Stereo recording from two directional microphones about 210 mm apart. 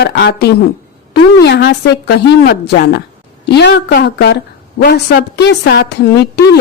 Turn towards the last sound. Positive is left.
turn(degrees=55)  # may be behind; listen again after turning